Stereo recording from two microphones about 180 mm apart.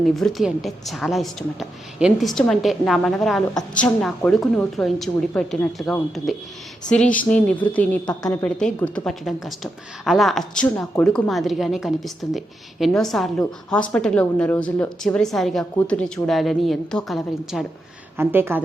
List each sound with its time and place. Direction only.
0.0 s a woman's voice: centre (ahead or behind)
18.2 s a woman's voice: 10° right (ahead or behind)